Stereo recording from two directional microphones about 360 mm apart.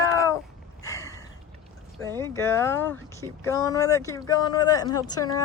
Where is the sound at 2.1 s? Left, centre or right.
Centre.